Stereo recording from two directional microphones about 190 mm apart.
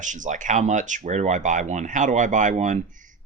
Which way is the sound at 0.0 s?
40° right (ahead or behind).